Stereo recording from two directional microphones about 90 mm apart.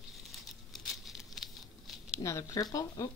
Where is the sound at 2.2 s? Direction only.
35° left (ahead or behind).